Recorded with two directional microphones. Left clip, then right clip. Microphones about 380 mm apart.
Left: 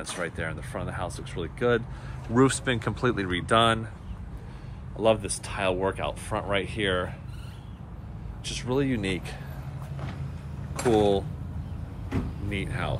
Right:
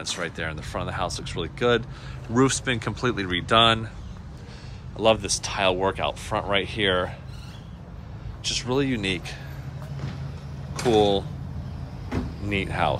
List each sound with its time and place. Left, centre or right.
0.0 s speech: centre
4.9 s speech: centre
8.5 s speech: centre
10.9 s speech: centre
12.1 s vehicle: right
12.4 s speech: centre